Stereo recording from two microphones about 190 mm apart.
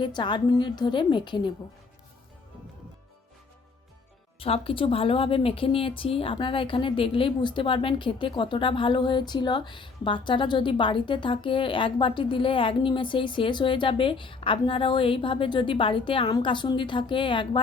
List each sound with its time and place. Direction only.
0.0 s a woman's voice: 25° left (ahead or behind)
4.4 s a woman's voice: 30° left (ahead or behind)